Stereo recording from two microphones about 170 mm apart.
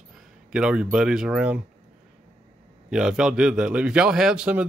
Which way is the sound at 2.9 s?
5° right (ahead or behind).